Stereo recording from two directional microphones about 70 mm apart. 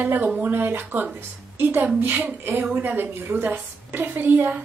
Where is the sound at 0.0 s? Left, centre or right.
Right.